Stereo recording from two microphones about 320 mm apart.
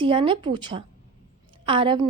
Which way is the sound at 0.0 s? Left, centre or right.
Centre.